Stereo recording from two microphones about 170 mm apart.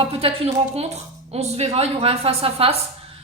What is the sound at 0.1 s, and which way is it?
Speech, 35° right (ahead or behind).